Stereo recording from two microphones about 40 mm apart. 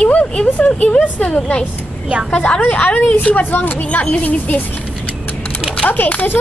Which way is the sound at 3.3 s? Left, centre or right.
Left.